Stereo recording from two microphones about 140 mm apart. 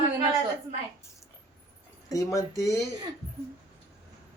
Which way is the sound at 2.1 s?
25° left (ahead or behind).